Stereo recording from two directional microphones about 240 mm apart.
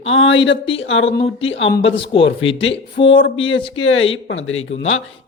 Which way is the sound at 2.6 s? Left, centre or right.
Left.